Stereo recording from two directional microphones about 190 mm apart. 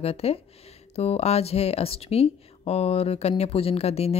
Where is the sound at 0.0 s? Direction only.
30° left (ahead or behind).